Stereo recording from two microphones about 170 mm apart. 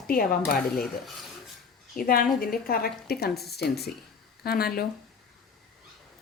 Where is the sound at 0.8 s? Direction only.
Centre (ahead or behind).